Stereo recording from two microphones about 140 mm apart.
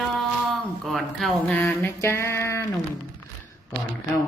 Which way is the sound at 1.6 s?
15° left (ahead or behind).